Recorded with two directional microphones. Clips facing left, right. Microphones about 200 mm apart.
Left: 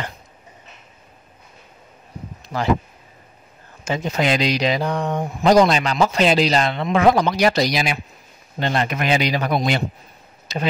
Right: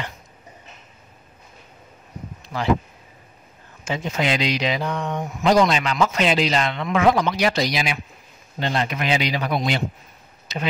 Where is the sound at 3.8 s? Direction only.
40° left (ahead or behind).